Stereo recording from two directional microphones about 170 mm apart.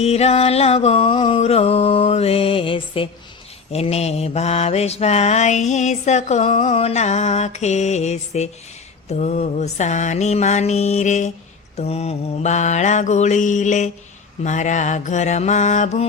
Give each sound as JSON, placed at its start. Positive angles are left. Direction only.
{"t": 0.0, "sound": "mantra", "side_deg": 40}